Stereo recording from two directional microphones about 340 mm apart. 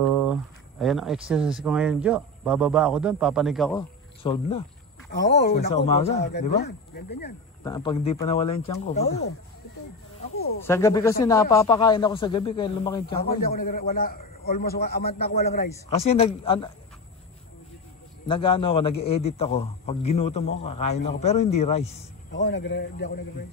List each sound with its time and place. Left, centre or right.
0.3 s a man's voice: centre
3.7 s speech: centre
5.2 s a man's voice: left
7.6 s a man's voice: centre
10.6 s a man's voice: centre
13.2 s a man's voice: left
18.3 s a man's voice: centre
22.4 s a man's voice: left